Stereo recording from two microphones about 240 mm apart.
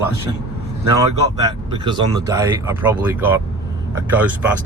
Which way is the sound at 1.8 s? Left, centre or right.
Centre.